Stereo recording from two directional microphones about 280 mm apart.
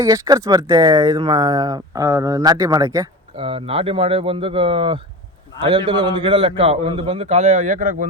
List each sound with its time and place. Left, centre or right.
0.0 s a man's voice: centre